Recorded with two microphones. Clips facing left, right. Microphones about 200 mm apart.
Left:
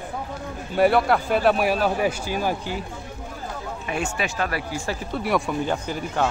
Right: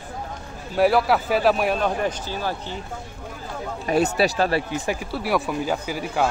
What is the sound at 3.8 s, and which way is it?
Speech, 35° right (ahead or behind).